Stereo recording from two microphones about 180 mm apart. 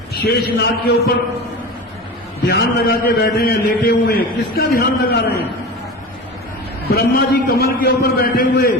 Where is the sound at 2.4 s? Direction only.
65° left (ahead or behind).